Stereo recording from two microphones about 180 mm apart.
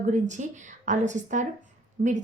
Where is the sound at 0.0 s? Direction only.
45° right (ahead or behind).